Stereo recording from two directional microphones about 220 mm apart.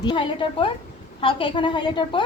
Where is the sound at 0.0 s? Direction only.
20° left (ahead or behind).